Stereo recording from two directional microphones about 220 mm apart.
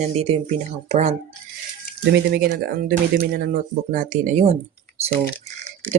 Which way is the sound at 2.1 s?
50° right (ahead or behind).